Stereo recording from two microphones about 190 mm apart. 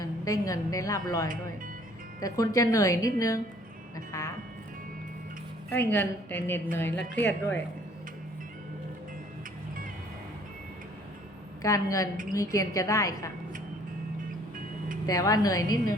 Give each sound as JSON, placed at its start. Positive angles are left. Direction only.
{"t": 0.0, "sound": "a woman's voice", "side_deg": 20}
{"t": 5.7, "sound": "a woman's voice", "side_deg": 10}
{"t": 11.6, "sound": "a woman's voice", "side_deg": 15}
{"t": 15.0, "sound": "a woman's voice", "side_deg": 20}